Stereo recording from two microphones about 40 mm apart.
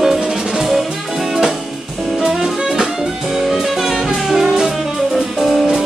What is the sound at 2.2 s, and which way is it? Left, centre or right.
Jazz, centre.